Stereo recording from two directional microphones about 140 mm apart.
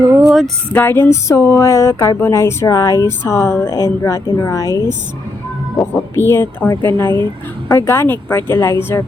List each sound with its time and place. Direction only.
0.2 s female singing: 5° right (ahead or behind)
0.7 s speech: 15° left (ahead or behind)